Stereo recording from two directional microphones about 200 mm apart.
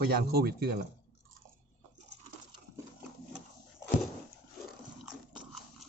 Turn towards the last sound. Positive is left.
turn(degrees=0)  # may be behind; listen again after turning